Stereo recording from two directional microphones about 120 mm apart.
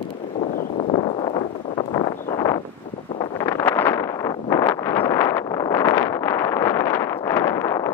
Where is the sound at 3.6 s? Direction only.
20° left (ahead or behind).